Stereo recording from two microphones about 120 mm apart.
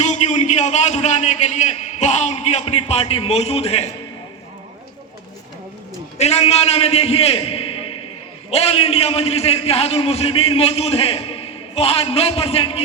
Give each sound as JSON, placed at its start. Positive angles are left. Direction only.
{"t": 0.0, "sound": "a man's voice", "side_deg": 70}
{"t": 6.1, "sound": "a man's voice", "side_deg": 60}